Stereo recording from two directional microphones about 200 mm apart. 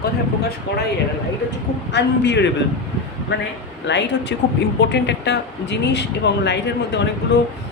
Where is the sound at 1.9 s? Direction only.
60° left (ahead or behind).